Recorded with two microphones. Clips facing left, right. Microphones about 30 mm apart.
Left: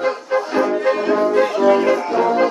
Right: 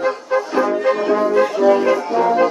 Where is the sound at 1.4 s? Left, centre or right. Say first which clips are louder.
Even; left.